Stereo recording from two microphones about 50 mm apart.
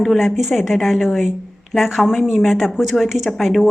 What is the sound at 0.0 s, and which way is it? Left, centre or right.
Speech, centre.